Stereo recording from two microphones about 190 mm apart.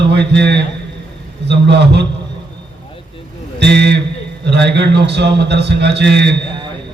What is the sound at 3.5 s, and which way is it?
A man's voice, 60° right (ahead or behind).